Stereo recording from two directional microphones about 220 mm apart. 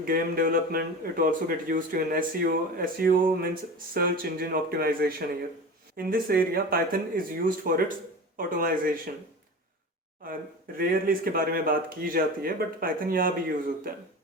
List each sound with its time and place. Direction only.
0.0 s a man's voice: 40° right (ahead or behind)
10.8 s a man's voice: 40° right (ahead or behind)